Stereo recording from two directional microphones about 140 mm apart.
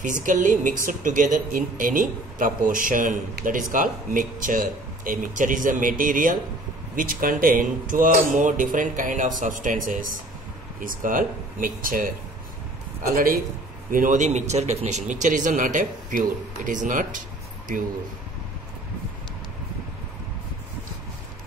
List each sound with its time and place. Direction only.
0.0 s speech: 65° right (ahead or behind)
13.1 s a man's voice: 90° right
13.8 s speech: 75° right (ahead or behind)